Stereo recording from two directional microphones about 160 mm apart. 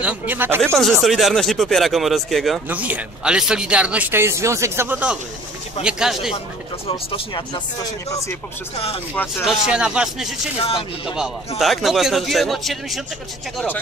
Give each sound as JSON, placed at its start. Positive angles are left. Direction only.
{"t": 0.0, "sound": "speech", "side_deg": -10}
{"t": 1.0, "sound": "speech", "side_deg": 0}
{"t": 6.9, "sound": "speech", "side_deg": 30}
{"t": 9.4, "sound": "speech", "side_deg": -5}
{"t": 10.6, "sound": "speech", "side_deg": 35}
{"t": 11.1, "sound": "speech", "side_deg": 0}